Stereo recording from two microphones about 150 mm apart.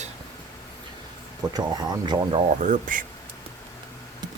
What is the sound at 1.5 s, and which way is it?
Speech, 25° right (ahead or behind).